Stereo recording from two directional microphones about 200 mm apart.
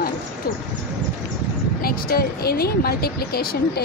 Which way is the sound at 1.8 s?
50° left (ahead or behind).